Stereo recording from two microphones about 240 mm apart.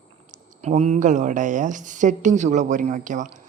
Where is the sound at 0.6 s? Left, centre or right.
Right.